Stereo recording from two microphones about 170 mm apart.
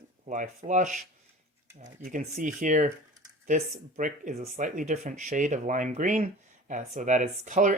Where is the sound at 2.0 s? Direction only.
50° right (ahead or behind).